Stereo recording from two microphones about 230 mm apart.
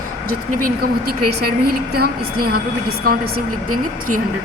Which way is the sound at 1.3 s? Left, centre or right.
Right.